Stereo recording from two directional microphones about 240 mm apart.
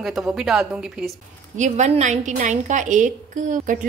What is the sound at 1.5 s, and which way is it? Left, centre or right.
A woman's voice, right.